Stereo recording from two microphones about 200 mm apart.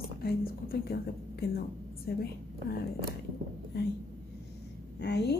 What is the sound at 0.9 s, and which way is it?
Speech, 50° left (ahead or behind).